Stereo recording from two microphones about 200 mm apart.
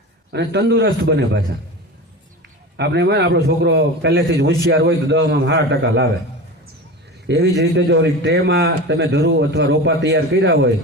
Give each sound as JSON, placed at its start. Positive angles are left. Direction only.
{"t": 0.3, "sound": "a man's voice", "side_deg": -60}
{"t": 2.7, "sound": "a man's voice", "side_deg": -55}
{"t": 7.3, "sound": "a man's voice", "side_deg": -60}